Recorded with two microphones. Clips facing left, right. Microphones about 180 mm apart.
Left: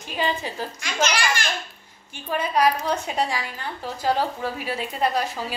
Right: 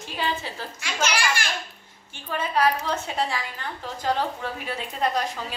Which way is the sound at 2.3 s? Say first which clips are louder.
Left 2 dB; 15° left (ahead or behind).